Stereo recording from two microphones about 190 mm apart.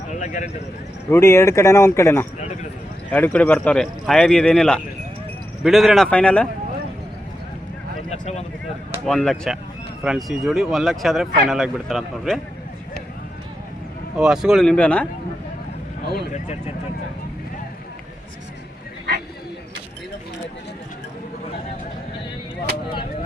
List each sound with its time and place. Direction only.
0.1 s speech: 40° left (ahead or behind)
1.1 s speech: 15° left (ahead or behind)
8.1 s speech: 35° left (ahead or behind)
9.0 s speech: centre (ahead or behind)
14.2 s speech: 5° right (ahead or behind)
16.3 s speech: 35° left (ahead or behind)